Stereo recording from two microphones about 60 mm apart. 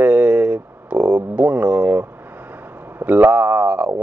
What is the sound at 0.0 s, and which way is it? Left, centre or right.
Speech, right.